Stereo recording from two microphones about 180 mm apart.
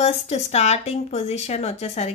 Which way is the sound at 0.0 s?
35° left (ahead or behind).